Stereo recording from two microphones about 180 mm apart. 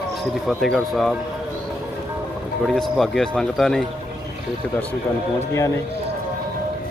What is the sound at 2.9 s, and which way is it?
Speech, centre (ahead or behind).